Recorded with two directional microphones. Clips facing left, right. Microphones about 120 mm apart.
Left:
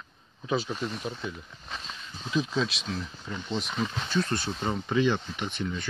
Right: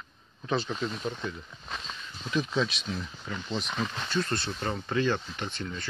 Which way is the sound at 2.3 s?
Centre (ahead or behind).